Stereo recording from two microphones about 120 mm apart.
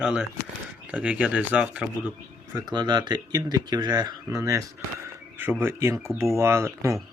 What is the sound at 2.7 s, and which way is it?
Speech, 35° right (ahead or behind).